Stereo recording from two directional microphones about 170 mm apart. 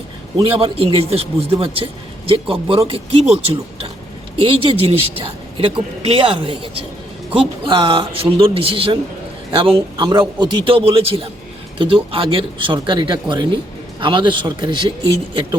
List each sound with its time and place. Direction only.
0.3 s speech: 30° right (ahead or behind)